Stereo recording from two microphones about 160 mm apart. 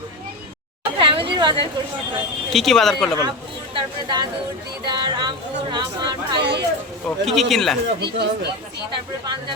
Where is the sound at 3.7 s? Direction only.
25° right (ahead or behind).